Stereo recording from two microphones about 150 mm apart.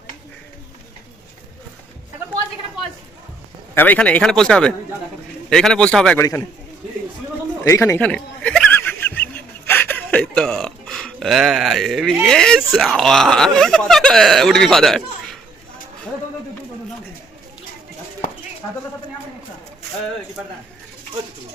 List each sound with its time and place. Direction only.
3.8 s speech: 10° left (ahead or behind)
6.1 s speech: 15° left (ahead or behind)
7.6 s snicker: 20° left (ahead or behind)
9.6 s a sound: 15° left (ahead or behind)
12.2 s speech: 5° left (ahead or behind)